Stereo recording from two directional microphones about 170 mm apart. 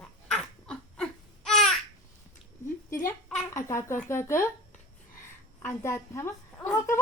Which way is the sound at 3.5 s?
15° left (ahead or behind).